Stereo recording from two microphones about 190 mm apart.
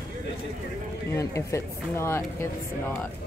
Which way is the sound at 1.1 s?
15° left (ahead or behind).